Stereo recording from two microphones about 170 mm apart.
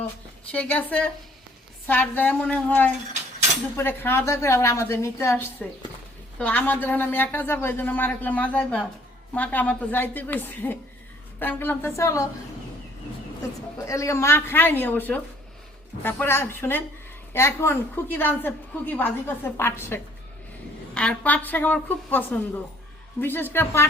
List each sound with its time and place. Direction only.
0.5 s a woman's voice: 10° left (ahead or behind)
13.8 s a woman's voice: 20° left (ahead or behind)